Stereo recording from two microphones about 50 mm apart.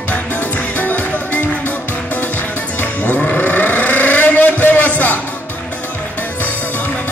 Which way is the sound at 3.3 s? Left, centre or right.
Left.